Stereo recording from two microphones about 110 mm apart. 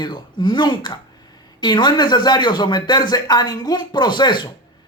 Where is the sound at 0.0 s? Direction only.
45° left (ahead or behind).